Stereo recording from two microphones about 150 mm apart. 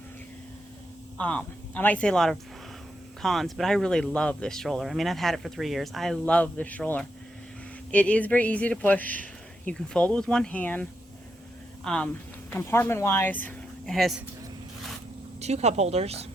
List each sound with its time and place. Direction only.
1.2 s speech: 10° left (ahead or behind)
11.9 s speech: 5° left (ahead or behind)
15.4 s speech: 45° right (ahead or behind)